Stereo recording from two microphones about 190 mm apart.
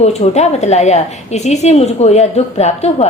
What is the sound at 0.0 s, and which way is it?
A woman's voice, 35° left (ahead or behind).